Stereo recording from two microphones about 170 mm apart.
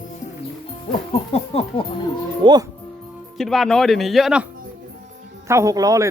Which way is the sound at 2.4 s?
25° right (ahead or behind).